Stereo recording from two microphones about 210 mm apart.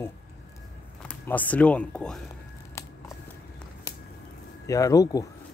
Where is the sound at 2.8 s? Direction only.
15° left (ahead or behind).